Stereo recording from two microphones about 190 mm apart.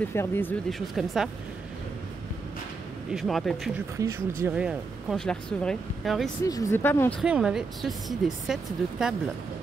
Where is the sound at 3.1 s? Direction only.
Centre (ahead or behind).